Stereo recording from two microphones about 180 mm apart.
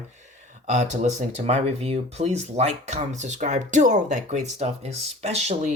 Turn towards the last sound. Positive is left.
turn(degrees=-35)  # may be behind; listen again after turning